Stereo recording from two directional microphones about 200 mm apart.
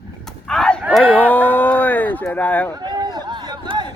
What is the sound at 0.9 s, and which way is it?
Speech, 5° right (ahead or behind).